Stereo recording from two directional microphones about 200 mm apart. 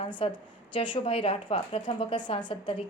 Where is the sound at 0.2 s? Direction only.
30° left (ahead or behind).